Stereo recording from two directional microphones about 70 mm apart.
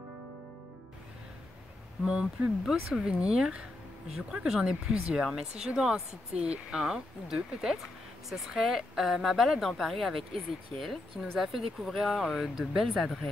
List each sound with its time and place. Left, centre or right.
2.0 s speech: centre
12.8 s speech: centre